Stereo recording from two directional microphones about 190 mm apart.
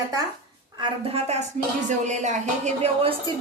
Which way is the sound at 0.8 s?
30° right (ahead or behind).